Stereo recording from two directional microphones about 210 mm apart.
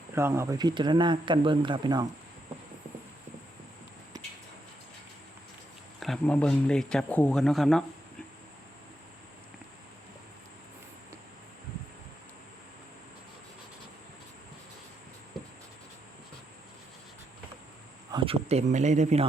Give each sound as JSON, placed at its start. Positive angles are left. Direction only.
{"t": 0.1, "sound": "speech", "side_deg": -10}
{"t": 6.0, "sound": "speech", "side_deg": 5}
{"t": 18.1, "sound": "a man's voice", "side_deg": -25}